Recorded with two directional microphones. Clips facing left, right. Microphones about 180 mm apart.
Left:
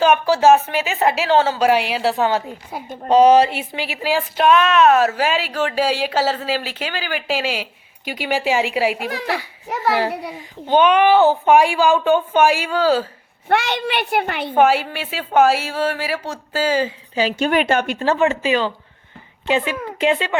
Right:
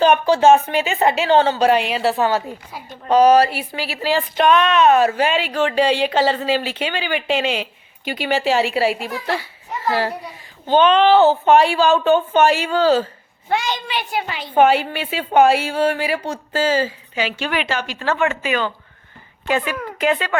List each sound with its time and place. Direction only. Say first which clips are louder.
0.0 s a woman's voice: right 1 dB; 5° left (ahead or behind)
2.7 s a woman's voice: left 5 dB; 50° left (ahead or behind)
3.1 s a woman's voice: left 1 dB; 25° left (ahead or behind)
9.0 s speech: even; 70° left (ahead or behind)
10.7 s a woman's voice: even; 10° left (ahead or behind)
13.5 s a child's voice: left 3 dB; 65° left (ahead or behind)
14.6 s a woman's voice: right 1 dB; 5° left (ahead or behind)
17.2 s a woman's voice: left 5 dB; 40° left (ahead or behind)
18.0 s speech: left 3 dB; 35° left (ahead or behind)